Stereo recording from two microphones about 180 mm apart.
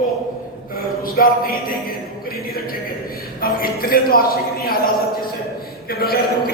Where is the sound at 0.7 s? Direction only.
55° left (ahead or behind).